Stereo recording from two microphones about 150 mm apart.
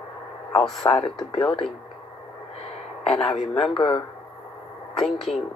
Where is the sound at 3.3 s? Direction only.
40° left (ahead or behind).